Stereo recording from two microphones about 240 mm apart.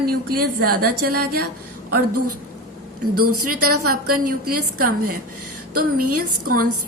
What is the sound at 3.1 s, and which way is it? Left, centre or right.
A woman's voice, right.